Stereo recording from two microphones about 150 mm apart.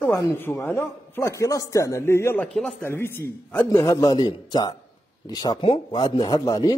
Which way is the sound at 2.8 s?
15° left (ahead or behind).